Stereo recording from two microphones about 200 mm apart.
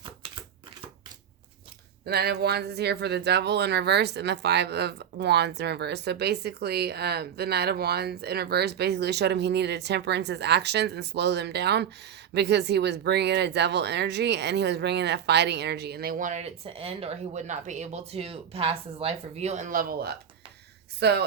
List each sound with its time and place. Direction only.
2.0 s a woman's voice: 50° right (ahead or behind)